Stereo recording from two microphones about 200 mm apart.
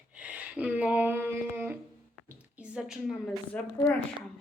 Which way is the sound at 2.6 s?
5° right (ahead or behind).